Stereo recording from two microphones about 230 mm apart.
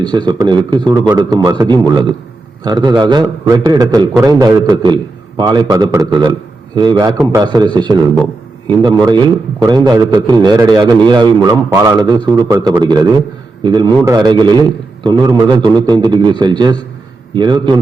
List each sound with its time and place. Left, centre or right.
0.0 s a man's voice: centre